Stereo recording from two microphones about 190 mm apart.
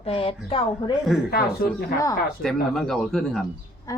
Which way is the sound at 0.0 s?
30° left (ahead or behind).